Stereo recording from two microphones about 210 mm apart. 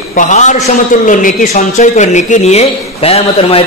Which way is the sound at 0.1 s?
35° left (ahead or behind).